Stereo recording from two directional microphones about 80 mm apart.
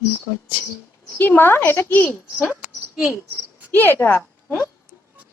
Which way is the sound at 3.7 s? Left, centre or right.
Left.